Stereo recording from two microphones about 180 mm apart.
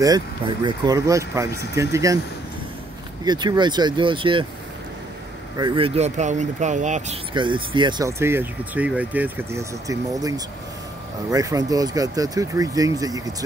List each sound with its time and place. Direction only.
0.7 s speech: 20° right (ahead or behind)
3.3 s speech: 25° right (ahead or behind)
5.6 s speech: 25° right (ahead or behind)
7.3 s speech: 25° right (ahead or behind)
8.2 s speech: 10° right (ahead or behind)